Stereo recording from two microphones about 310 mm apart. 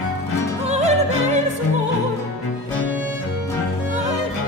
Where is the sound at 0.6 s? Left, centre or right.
Right.